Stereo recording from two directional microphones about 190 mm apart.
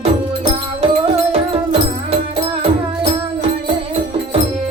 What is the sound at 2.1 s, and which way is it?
Music, 30° right (ahead or behind).